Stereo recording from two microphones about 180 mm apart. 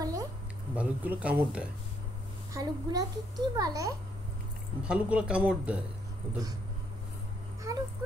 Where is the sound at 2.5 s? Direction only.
20° right (ahead or behind).